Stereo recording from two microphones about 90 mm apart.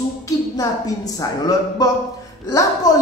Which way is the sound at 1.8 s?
50° left (ahead or behind).